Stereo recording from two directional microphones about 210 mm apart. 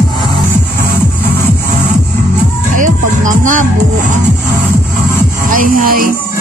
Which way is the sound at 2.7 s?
40° right (ahead or behind).